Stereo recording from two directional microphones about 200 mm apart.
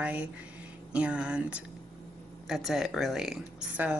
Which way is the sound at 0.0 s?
5° right (ahead or behind).